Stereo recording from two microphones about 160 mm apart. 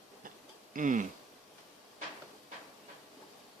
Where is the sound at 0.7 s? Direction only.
55° right (ahead or behind).